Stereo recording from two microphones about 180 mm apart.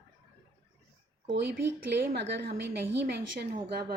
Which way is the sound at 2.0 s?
70° right (ahead or behind).